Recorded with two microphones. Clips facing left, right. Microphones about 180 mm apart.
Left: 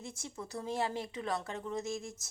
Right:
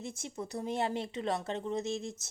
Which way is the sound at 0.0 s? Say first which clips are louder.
Right 4 dB; 20° right (ahead or behind).